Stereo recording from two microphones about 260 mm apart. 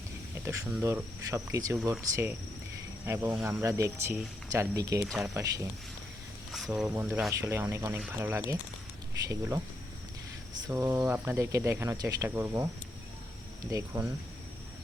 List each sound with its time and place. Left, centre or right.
0.4 s speech: centre
5.0 s speech: centre
5.3 s speech: centre
6.7 s speech: centre
10.7 s speech: centre
13.7 s speech: centre